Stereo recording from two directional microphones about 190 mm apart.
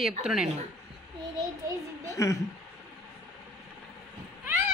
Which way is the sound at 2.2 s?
15° left (ahead or behind).